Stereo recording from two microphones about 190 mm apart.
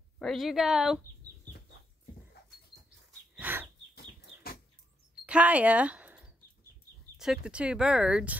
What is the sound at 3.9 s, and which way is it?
Chicken, 55° left (ahead or behind).